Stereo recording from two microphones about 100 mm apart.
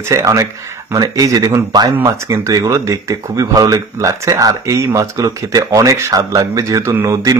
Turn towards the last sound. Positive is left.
turn(degrees=-35)  # may be behind; listen again after turning